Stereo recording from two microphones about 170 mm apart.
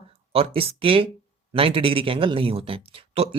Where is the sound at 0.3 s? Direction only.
35° right (ahead or behind).